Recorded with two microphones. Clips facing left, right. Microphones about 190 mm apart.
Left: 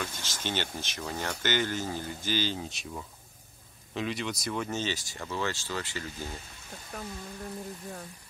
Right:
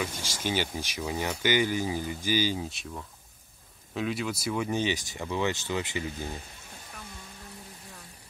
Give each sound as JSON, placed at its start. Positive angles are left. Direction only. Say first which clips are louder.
{"t": 0.0, "sound": "speech", "louder": "right 4 dB", "side_deg": -10}